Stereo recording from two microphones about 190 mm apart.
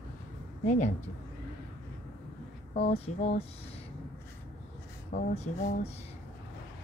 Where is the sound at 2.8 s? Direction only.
35° left (ahead or behind).